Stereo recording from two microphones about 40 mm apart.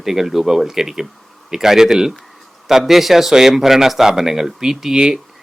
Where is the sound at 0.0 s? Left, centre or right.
Centre.